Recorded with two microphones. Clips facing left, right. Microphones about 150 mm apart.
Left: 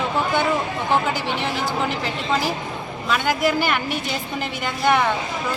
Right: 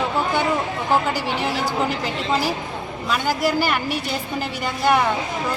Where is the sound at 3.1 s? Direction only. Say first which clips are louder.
Left 1 dB; 5° right (ahead or behind).